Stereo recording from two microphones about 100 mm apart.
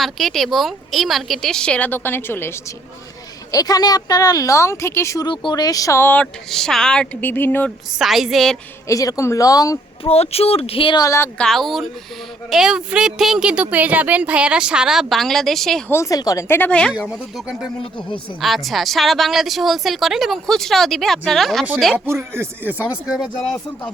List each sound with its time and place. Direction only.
0.0 s a woman's voice: centre (ahead or behind); by 2.7 s 25° left (ahead or behind)
3.5 s a woman's voice: 40° left (ahead or behind)
5.2 s a woman's voice: 50° left (ahead or behind); by 6.2 s 20° left (ahead or behind)
6.5 s speech: 5° left (ahead or behind); by 7.7 s 20° left (ahead or behind)
7.9 s a woman's voice: 5° right (ahead or behind)
8.9 s a woman's voice: 35° left (ahead or behind)
10.0 s speech: 90° left; by 10.9 s 70° left (ahead or behind)
11.3 s a woman's voice: 5° left (ahead or behind)
15.9 s a woman's voice: 30° left (ahead or behind)
16.5 s speech: 15° left (ahead or behind)
16.9 s a woman's voice: 10° right (ahead or behind)
21.9 s speech: 25° right (ahead or behind)